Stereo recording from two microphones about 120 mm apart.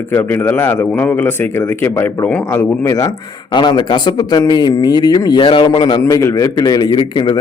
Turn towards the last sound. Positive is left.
turn(degrees=40)  # may be behind; listen again after turning